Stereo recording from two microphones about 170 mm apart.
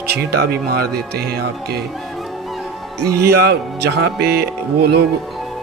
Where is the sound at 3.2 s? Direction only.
70° right (ahead or behind).